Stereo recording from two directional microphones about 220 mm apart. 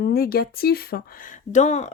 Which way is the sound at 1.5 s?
30° left (ahead or behind).